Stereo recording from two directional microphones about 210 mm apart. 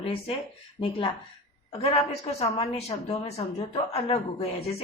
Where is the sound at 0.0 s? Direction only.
25° left (ahead or behind).